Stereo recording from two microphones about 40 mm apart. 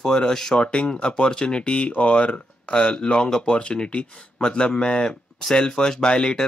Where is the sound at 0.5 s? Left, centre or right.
Left.